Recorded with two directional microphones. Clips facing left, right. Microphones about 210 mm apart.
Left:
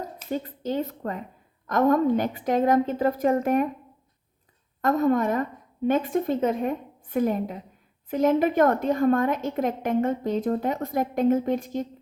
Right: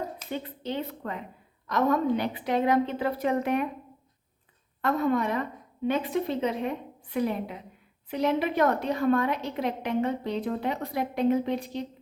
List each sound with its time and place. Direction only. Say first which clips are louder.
0.3 s a woman's voice: left 8 dB; 40° left (ahead or behind)
4.8 s a woman's voice: left 4 dB; 45° left (ahead or behind)